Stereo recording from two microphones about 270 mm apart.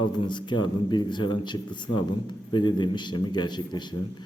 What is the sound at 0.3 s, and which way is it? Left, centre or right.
A man's voice, centre.